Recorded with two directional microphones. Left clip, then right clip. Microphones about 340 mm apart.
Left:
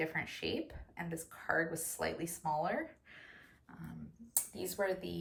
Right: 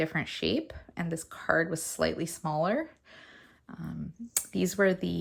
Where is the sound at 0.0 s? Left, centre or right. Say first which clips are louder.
Right 7 dB; centre.